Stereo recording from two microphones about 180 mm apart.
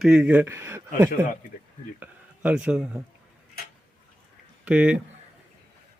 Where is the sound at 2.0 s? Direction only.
5° right (ahead or behind).